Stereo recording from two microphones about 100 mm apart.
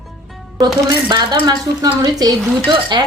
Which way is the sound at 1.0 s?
45° right (ahead or behind).